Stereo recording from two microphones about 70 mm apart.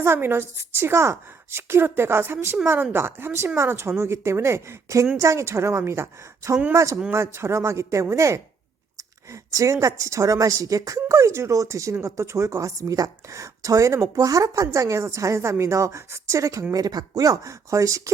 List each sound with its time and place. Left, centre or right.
0.0 s a woman's voice: right
7.1 s a woman's voice: right
16.7 s speech: right